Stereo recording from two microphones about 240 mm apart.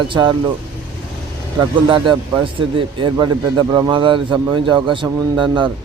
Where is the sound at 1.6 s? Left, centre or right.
Centre.